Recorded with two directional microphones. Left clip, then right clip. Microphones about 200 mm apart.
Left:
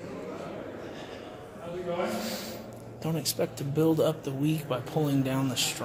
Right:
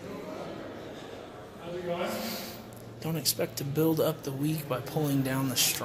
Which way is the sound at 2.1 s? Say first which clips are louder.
Left 1 dB; 25° left (ahead or behind).